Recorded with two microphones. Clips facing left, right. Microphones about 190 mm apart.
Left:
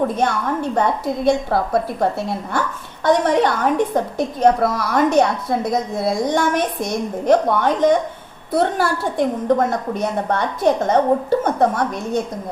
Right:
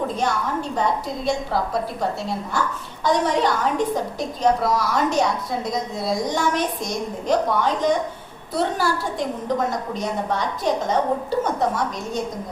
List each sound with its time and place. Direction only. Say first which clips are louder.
0.8 s a woman's voice: left 4 dB; 55° left (ahead or behind)